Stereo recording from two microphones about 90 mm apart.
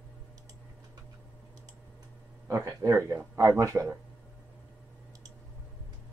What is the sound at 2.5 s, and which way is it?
Speech, 30° right (ahead or behind).